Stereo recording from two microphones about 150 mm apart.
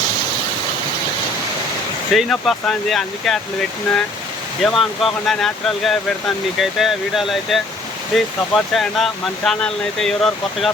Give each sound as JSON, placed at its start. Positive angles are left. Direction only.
{"t": 2.1, "sound": "speech", "side_deg": 0}
{"t": 4.6, "sound": "speech", "side_deg": 0}